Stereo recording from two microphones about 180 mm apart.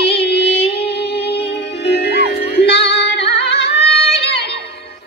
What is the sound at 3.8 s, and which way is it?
Music, 35° left (ahead or behind).